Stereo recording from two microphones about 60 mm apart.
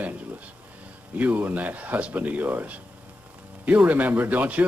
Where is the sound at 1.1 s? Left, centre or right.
Right.